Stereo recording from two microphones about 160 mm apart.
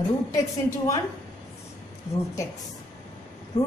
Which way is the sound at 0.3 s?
20° left (ahead or behind).